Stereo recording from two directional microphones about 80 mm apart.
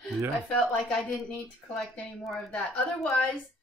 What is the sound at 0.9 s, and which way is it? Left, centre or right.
Speech, centre.